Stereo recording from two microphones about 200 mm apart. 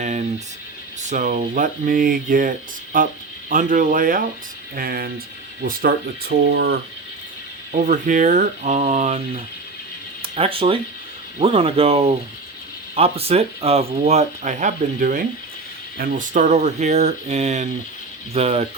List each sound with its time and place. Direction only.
0.0 s speech: 35° right (ahead or behind); by 6.7 s 55° right (ahead or behind)
7.7 s speech: 40° right (ahead or behind)